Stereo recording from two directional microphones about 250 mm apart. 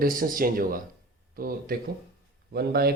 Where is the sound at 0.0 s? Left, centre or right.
Right.